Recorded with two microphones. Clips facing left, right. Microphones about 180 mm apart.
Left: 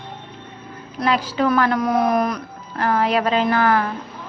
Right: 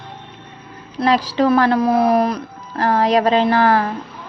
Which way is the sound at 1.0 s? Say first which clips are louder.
Right 4 dB; 35° right (ahead or behind).